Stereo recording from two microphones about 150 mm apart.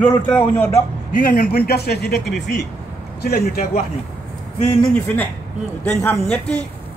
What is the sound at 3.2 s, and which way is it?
Speech, 90° left.